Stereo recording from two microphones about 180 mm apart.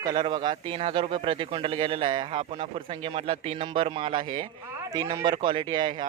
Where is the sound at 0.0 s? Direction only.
25° right (ahead or behind).